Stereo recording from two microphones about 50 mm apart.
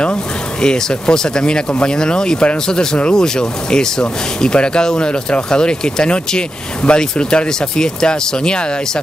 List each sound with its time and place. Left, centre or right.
0.0 s speech: centre